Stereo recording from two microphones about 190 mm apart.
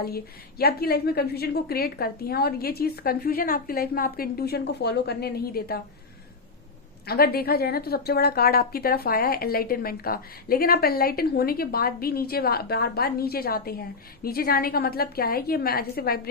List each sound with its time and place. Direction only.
0.6 s a woman's voice: 55° left (ahead or behind)
7.1 s a woman's voice: 55° left (ahead or behind)